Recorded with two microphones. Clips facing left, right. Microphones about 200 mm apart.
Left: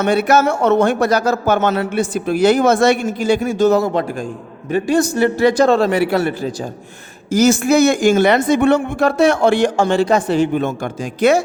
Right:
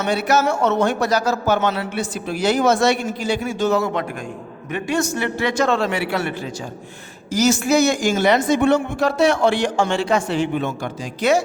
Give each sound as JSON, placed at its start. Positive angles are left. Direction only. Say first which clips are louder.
{"t": 0.0, "sound": "a man's voice", "louder": "left 5 dB", "side_deg": 55}
{"t": 7.3, "sound": "speech", "louder": "left 4 dB", "side_deg": 55}